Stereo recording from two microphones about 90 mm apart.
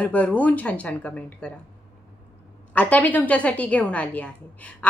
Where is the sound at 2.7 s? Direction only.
15° left (ahead or behind).